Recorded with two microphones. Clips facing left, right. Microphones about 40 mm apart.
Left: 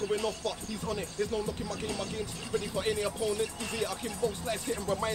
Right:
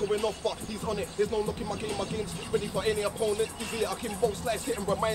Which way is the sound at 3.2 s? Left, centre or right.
Right.